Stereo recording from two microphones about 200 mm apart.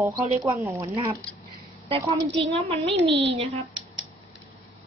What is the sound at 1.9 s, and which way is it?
A woman's voice, 25° right (ahead or behind).